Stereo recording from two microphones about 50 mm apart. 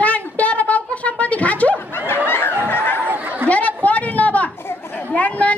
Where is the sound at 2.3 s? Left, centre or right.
Left.